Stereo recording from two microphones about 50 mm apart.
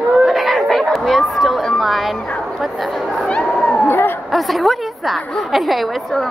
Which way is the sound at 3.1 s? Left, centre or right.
Centre.